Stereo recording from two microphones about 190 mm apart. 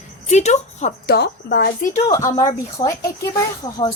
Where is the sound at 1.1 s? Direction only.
60° left (ahead or behind); by 2.1 s 40° left (ahead or behind).